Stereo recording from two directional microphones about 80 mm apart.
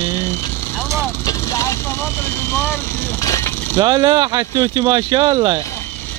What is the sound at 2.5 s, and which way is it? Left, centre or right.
Speech, left.